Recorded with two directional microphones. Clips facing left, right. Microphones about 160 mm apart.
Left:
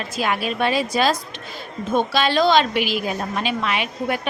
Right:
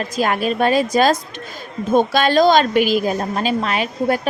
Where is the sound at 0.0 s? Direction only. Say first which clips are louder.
Right 4 dB; 45° right (ahead or behind).